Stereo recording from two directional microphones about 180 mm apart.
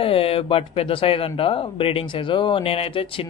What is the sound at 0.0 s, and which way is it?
Speech, 30° left (ahead or behind).